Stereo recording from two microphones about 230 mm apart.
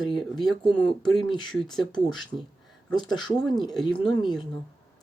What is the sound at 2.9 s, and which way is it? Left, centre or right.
Speech, centre.